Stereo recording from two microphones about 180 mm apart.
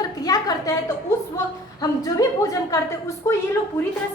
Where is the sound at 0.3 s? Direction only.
20° left (ahead or behind).